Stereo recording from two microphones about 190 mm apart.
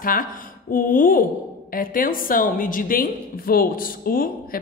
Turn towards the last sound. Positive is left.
turn(degrees=50)  # may be behind; listen again after turning